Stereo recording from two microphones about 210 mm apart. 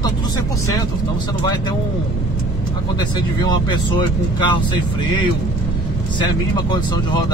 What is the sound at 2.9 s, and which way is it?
Speech, 20° left (ahead or behind).